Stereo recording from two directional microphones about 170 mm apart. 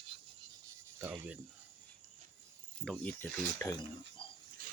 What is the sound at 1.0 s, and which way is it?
Speech, 5° right (ahead or behind).